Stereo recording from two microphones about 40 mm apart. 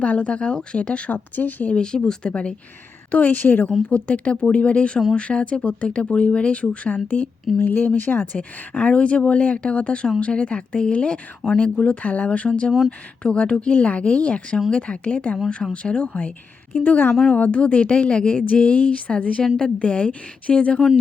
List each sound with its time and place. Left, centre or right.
0.0 s speech: left
1.1 s speech: left
1.7 s speech: left
3.1 s speech: left
3.4 s speech: left
3.8 s speech: left
8.3 s speech: left